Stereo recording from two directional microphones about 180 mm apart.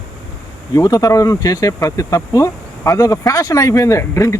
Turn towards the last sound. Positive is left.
turn(degrees=15)  # may be behind; listen again after turning